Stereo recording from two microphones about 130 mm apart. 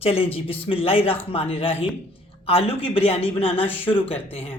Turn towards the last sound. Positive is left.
turn(degrees=45)  # may be behind; listen again after turning